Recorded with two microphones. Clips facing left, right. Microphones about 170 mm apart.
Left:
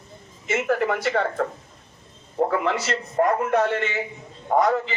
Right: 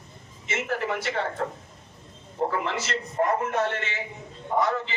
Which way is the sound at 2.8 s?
60° left (ahead or behind).